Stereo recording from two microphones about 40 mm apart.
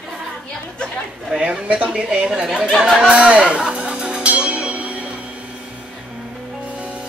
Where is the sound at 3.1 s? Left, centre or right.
Right.